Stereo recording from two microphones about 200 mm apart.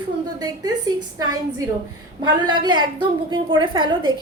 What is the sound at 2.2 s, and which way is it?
A woman's voice, 20° right (ahead or behind).